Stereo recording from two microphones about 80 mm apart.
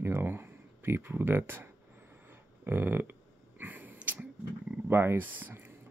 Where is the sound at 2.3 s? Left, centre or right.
Right.